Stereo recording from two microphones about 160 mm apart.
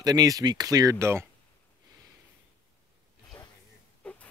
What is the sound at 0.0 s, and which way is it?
Speech, 25° right (ahead or behind).